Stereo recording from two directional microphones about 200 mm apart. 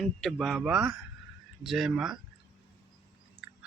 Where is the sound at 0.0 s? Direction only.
Centre (ahead or behind).